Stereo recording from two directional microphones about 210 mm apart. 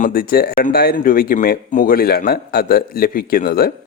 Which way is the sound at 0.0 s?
45° left (ahead or behind).